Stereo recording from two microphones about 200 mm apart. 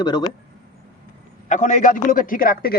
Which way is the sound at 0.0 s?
20° left (ahead or behind).